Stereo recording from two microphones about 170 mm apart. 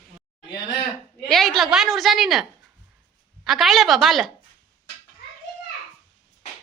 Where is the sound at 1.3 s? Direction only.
Centre (ahead or behind).